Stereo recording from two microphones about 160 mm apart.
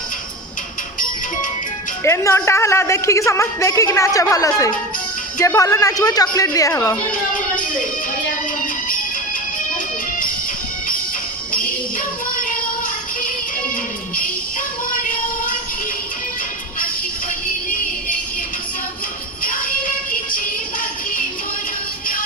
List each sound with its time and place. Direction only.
2.0 s a woman's voice: 15° left (ahead or behind)
8.6 s music: 60° left (ahead or behind)
11.5 s music: 60° left (ahead or behind)
19.4 s music: 60° left (ahead or behind)